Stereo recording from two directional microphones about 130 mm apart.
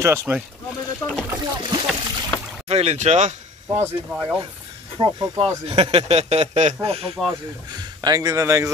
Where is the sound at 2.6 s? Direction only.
55° right (ahead or behind).